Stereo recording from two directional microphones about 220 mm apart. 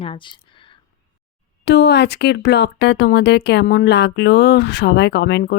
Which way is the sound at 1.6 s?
50° left (ahead or behind).